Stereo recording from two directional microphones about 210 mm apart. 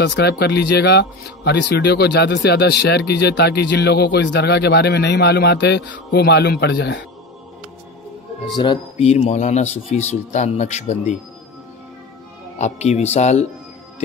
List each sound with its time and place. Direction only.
0.0 s speech: 50° left (ahead or behind)
8.5 s speech: 25° left (ahead or behind)
12.5 s speech: 30° left (ahead or behind)